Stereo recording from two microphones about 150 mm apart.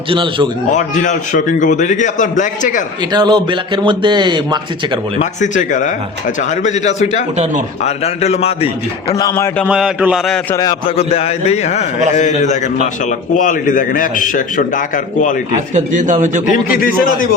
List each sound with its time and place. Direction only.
0.1 s a man's voice: 35° right (ahead or behind)
0.7 s a man's voice: 55° left (ahead or behind)
3.0 s speech: 30° right (ahead or behind)
5.2 s speech: 55° left (ahead or behind)
9.1 s speech: 20° left (ahead or behind)
9.6 s speech: 5° right (ahead or behind)
10.5 s speech: 25° left (ahead or behind)
10.8 s a man's voice: 40° left (ahead or behind); by 15.4 s 60° left (ahead or behind)
15.5 s speech: 55° right (ahead or behind)
16.7 s speech: 70° left (ahead or behind)